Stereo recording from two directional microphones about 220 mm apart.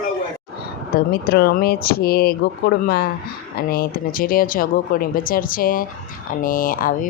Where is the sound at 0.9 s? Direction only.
45° left (ahead or behind).